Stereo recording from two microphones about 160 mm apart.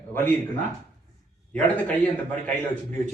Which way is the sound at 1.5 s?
10° left (ahead or behind).